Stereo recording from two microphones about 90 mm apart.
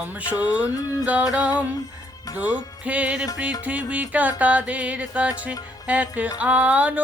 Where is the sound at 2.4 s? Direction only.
15° right (ahead or behind).